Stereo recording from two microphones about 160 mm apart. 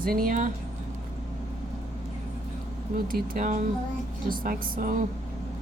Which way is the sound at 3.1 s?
55° right (ahead or behind).